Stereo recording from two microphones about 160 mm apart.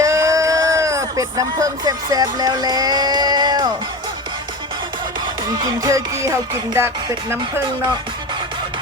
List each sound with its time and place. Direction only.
0.0 s a sound: 20° right (ahead or behind)
5.8 s music: 20° right (ahead or behind)
6.7 s speech: 15° right (ahead or behind)